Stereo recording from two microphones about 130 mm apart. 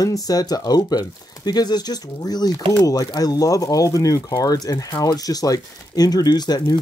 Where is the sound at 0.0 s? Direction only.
25° left (ahead or behind).